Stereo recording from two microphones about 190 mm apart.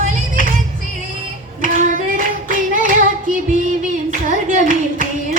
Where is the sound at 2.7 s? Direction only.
40° right (ahead or behind).